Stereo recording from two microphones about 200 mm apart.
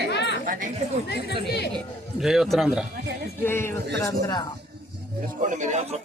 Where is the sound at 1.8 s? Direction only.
Centre (ahead or behind).